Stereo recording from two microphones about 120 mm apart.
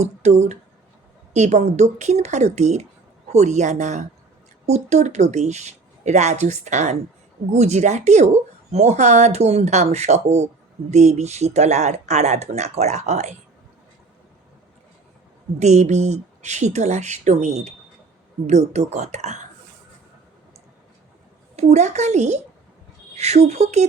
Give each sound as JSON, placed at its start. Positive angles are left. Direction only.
{"t": 0.0, "sound": "speech", "side_deg": -70}
{"t": 4.6, "sound": "speech", "side_deg": -65}
{"t": 7.5, "sound": "speech", "side_deg": -70}
{"t": 15.5, "sound": "speech", "side_deg": -70}
{"t": 21.5, "sound": "speech", "side_deg": -70}